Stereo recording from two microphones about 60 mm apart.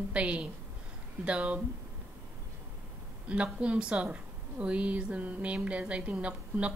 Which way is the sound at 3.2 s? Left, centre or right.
Right.